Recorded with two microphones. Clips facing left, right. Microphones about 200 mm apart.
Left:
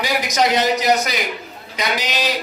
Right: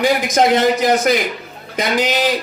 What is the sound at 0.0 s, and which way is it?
A man's voice, 50° right (ahead or behind).